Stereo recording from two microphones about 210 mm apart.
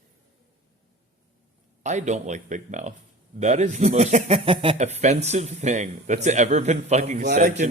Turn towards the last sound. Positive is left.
turn(degrees=-35)  # may be behind; listen again after turning